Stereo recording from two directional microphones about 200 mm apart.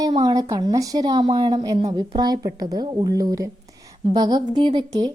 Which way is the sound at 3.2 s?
15° right (ahead or behind).